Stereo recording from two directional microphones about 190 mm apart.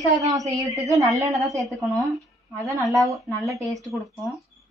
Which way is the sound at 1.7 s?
Centre (ahead or behind).